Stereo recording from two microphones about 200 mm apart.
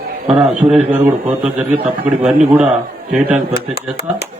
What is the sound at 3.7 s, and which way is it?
Speech, 55° left (ahead or behind).